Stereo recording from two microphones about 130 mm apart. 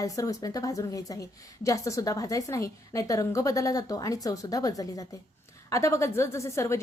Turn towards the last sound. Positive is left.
turn(degrees=20)  # may be behind; listen again after turning